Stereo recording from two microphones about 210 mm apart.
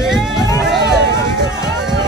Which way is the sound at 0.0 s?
Centre (ahead or behind).